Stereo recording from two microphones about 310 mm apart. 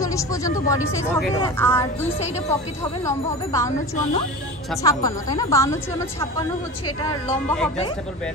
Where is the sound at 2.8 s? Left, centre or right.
Centre.